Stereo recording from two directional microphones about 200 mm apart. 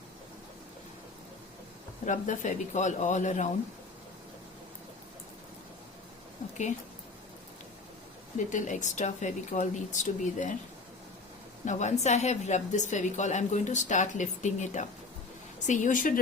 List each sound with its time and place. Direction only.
2.0 s a woman's voice: 40° left (ahead or behind)
8.4 s a woman's voice: 40° left (ahead or behind)
11.6 s a woman's voice: 35° left (ahead or behind)